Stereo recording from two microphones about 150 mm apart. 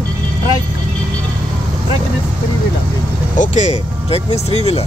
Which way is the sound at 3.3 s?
55° left (ahead or behind).